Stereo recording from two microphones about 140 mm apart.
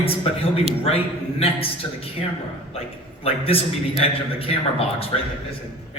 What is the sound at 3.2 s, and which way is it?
A man's voice, 45° left (ahead or behind).